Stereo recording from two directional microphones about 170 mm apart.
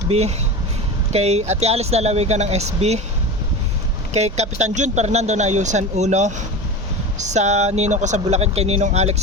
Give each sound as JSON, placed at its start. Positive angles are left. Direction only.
{"t": 0.1, "sound": "speech", "side_deg": -40}
{"t": 4.1, "sound": "speech", "side_deg": -40}